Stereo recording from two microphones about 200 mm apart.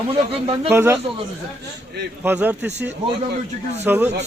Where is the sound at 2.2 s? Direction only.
10° right (ahead or behind).